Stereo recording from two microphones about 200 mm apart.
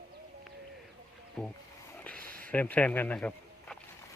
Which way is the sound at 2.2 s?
45° right (ahead or behind).